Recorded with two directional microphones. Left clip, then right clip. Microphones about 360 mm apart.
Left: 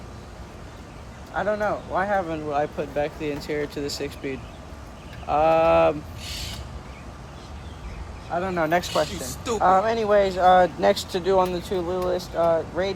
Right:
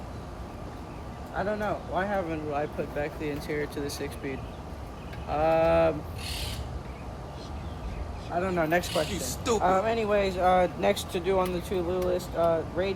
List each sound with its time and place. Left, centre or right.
1.4 s speech: centre
8.4 s speech: centre
9.1 s speech: centre
9.6 s speech: centre